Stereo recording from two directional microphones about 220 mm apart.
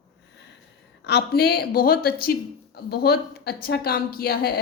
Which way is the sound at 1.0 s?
45° left (ahead or behind).